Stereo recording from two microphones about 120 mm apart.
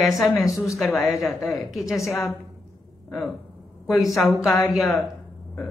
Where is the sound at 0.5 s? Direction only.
30° left (ahead or behind).